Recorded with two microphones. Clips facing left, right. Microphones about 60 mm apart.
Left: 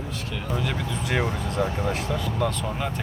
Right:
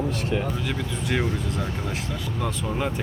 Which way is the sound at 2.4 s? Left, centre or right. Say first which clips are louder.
Right 3 dB; centre.